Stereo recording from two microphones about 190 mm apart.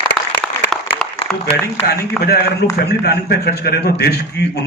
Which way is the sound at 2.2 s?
55° left (ahead or behind).